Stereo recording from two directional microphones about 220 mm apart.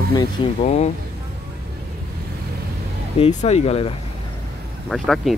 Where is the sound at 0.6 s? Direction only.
30° left (ahead or behind).